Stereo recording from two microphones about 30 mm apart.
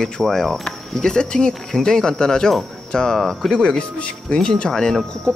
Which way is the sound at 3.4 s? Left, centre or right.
Centre.